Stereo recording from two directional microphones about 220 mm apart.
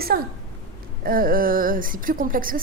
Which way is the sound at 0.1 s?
45° right (ahead or behind).